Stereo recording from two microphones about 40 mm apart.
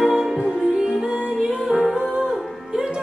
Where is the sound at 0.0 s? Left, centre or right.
Centre.